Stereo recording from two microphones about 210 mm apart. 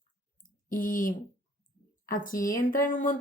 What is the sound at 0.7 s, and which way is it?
A woman's voice, 40° left (ahead or behind).